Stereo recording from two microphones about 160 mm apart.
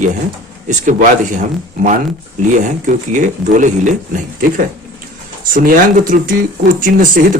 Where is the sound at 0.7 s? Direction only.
50° right (ahead or behind).